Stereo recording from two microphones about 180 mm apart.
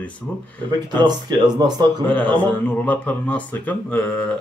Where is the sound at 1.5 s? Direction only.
25° right (ahead or behind).